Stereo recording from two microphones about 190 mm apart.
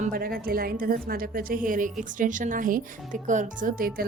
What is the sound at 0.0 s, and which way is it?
A woman's voice, 50° right (ahead or behind).